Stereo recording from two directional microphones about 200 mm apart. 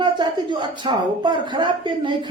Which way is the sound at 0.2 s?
20° right (ahead or behind).